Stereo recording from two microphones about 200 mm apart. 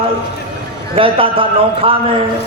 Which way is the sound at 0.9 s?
25° right (ahead or behind).